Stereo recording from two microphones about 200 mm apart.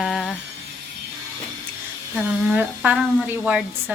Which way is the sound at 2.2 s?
5° right (ahead or behind).